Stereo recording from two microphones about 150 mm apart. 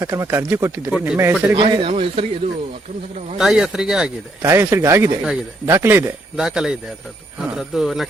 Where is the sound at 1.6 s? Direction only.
35° right (ahead or behind).